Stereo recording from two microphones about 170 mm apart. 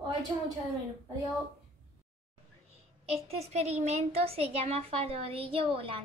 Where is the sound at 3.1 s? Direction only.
40° right (ahead or behind).